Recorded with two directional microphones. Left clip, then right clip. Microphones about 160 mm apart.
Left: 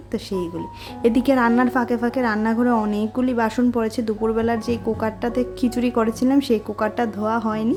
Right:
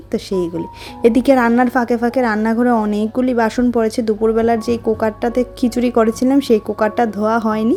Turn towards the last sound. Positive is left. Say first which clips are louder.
# right 6 dB
turn(degrees=-35)  # may be behind; listen again after turning